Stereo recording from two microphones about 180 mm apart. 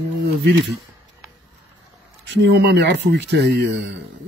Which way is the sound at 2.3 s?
70° right (ahead or behind).